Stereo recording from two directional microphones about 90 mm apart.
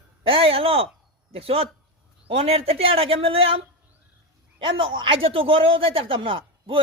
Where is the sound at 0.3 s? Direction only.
90° right.